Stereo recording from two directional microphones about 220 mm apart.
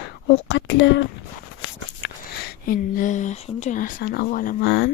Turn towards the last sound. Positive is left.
turn(degrees=50)  # may be behind; listen again after turning